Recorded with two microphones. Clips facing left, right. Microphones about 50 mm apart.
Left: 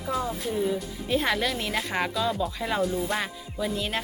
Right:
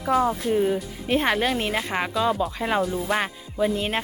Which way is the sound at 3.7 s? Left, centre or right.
Right.